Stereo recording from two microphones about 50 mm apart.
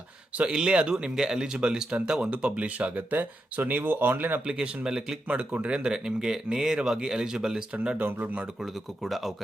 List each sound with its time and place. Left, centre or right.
0.4 s speech: centre; by 4.4 s right
4.4 s speech: centre
6.1 s speech: centre
7.9 s speech: right
9.0 s speech: centre